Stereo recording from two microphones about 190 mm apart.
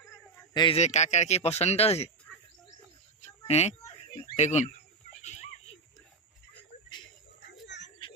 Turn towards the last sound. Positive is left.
turn(degrees=65)  # may be behind; listen again after turning